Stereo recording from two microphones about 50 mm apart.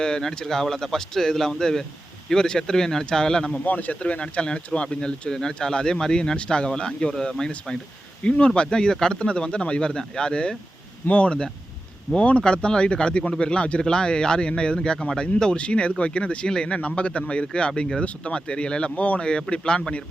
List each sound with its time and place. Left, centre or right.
0.0 s speech: centre
3.6 s speech: left; by 7.8 s centre
8.2 s speech: left